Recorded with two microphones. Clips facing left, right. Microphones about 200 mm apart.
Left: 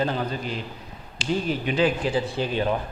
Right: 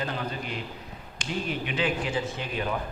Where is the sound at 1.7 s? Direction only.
35° left (ahead or behind).